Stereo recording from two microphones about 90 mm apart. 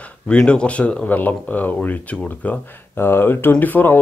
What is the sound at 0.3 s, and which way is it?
Speech, 10° left (ahead or behind).